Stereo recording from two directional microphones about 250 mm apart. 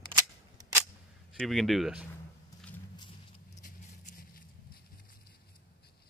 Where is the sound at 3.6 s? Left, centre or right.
Left.